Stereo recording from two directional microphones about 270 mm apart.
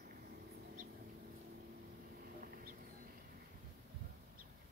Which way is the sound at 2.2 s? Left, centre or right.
Right.